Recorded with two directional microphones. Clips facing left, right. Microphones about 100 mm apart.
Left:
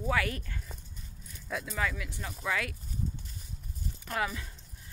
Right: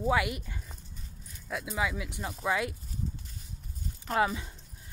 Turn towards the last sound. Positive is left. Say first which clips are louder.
# right 5 dB
turn(degrees=-25)  # may be behind; listen again after turning